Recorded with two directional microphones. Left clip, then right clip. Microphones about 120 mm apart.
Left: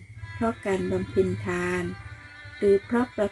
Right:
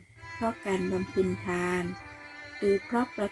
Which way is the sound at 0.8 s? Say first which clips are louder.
Left 4 dB; 45° right (ahead or behind).